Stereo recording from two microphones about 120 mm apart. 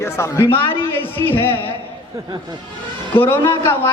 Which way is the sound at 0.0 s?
25° left (ahead or behind).